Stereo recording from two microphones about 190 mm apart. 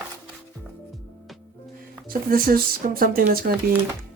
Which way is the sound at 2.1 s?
50° right (ahead or behind).